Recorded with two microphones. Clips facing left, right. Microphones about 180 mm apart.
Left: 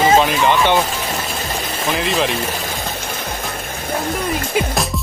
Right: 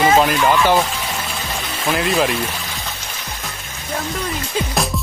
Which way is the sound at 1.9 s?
Centre (ahead or behind).